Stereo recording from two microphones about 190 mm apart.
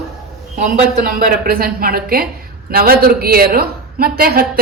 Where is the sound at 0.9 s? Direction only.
50° right (ahead or behind).